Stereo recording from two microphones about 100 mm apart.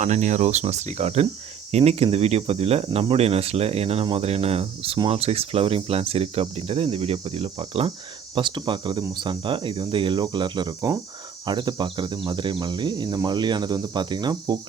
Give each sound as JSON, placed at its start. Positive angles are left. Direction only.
{"t": 0.6, "sound": "speech", "side_deg": -90}
{"t": 5.0, "sound": "speech", "side_deg": -85}
{"t": 8.4, "sound": "speech", "side_deg": -55}